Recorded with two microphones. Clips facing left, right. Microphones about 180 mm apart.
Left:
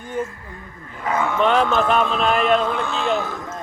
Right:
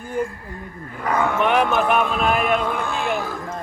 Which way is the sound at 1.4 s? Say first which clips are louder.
Left 3 dB; 15° right (ahead or behind).